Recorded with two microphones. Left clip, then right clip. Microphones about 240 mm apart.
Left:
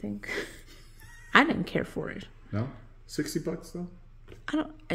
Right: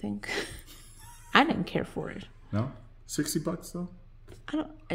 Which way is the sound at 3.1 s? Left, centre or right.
Right.